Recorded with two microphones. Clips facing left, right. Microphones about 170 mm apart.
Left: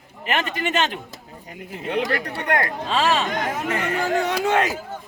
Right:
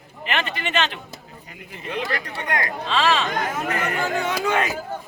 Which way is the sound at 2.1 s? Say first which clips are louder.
Left 4 dB; 55° left (ahead or behind).